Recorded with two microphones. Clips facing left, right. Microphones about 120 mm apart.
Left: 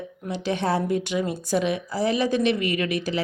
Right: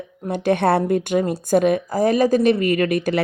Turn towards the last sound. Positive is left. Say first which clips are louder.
# right 6 dB
turn(degrees=-50)  # may be behind; listen again after turning